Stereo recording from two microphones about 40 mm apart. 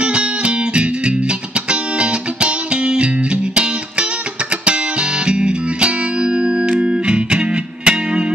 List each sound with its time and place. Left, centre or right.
1.7 s music: right
5.2 s music: right